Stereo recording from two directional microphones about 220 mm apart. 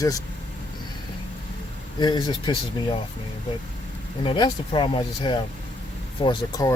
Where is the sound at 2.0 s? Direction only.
20° left (ahead or behind).